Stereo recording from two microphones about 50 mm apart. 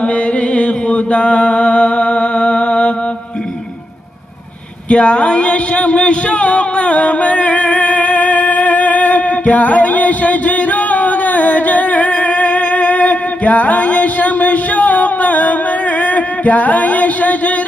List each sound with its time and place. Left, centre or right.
0.6 s mantra: left
4.8 s speech: left
5.3 s a sound: left
16.0 s music: left